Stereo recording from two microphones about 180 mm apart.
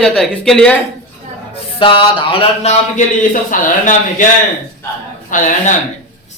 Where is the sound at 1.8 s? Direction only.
30° left (ahead or behind).